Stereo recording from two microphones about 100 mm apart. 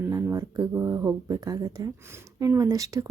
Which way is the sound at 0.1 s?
35° right (ahead or behind).